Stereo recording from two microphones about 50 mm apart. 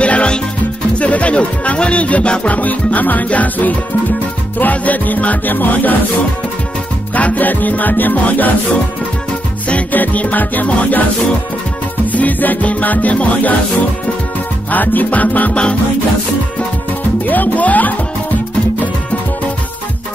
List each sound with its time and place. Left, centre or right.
0.0 s music: left
0.9 s speech: left
4.6 s music: left
7.2 s music: left
12.1 s music: left
14.7 s music: left
17.3 s music: left